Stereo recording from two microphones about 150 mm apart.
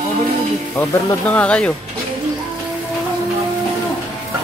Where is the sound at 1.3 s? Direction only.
10° left (ahead or behind).